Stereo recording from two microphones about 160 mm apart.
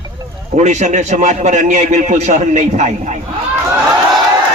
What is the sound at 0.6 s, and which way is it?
A man's voice, 45° right (ahead or behind).